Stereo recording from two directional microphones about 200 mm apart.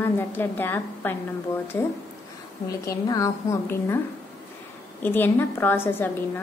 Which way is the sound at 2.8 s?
15° left (ahead or behind).